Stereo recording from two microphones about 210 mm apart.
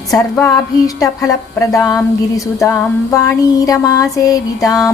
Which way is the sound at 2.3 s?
15° left (ahead or behind).